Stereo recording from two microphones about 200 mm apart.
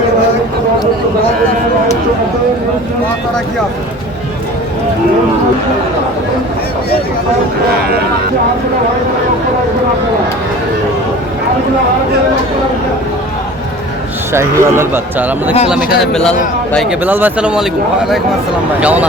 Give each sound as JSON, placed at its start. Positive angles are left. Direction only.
{"t": 14.3, "sound": "speech", "side_deg": -10}
{"t": 17.0, "sound": "speech", "side_deg": -10}